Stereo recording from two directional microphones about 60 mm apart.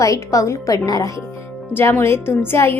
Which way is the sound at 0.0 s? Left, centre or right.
Left.